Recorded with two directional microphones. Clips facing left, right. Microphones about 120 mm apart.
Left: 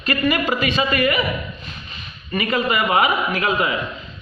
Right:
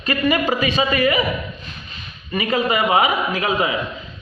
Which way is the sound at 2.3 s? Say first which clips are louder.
Right 1 dB; 20° right (ahead or behind).